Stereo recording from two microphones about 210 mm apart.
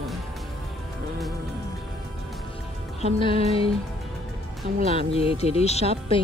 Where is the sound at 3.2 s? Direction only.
25° left (ahead or behind).